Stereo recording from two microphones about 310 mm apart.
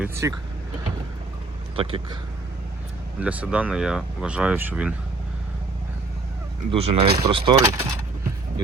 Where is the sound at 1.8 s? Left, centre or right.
Centre.